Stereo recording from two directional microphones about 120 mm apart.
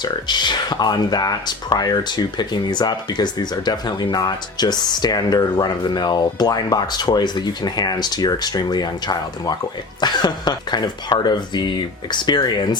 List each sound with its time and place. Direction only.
0.0 s speech: 40° left (ahead or behind)